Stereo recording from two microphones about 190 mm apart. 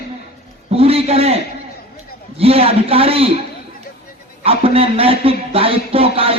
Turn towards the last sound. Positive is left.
turn(degrees=-30)  # may be behind; listen again after turning